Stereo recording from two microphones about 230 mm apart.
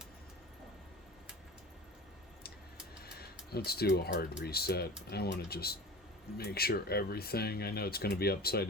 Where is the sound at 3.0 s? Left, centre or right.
Left.